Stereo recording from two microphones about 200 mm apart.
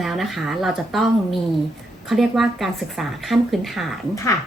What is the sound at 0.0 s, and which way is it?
Speech, centre (ahead or behind).